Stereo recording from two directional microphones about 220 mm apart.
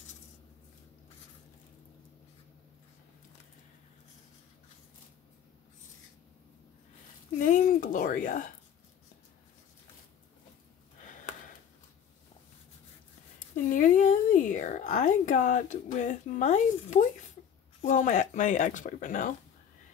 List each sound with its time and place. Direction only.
7.3 s speech: 35° left (ahead or behind)
13.7 s a sound: 35° left (ahead or behind)
17.8 s speech: 35° left (ahead or behind)